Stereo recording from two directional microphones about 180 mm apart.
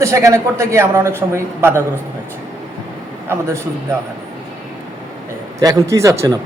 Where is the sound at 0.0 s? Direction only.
15° right (ahead or behind).